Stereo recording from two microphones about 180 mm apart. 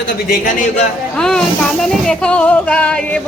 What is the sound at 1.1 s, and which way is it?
Speech, 5° left (ahead or behind).